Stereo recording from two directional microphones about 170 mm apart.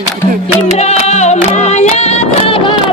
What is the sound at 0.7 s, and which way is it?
Music, 40° left (ahead or behind).